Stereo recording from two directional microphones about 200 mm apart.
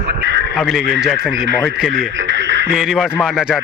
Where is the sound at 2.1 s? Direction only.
65° right (ahead or behind).